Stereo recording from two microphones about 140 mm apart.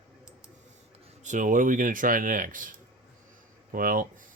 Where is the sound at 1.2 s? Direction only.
65° right (ahead or behind).